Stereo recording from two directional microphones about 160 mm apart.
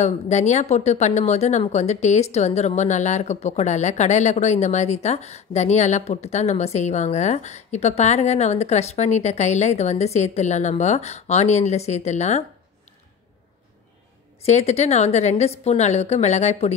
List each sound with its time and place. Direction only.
0.0 s a woman's voice: 45° left (ahead or behind)
14.4 s a woman's voice: 45° left (ahead or behind)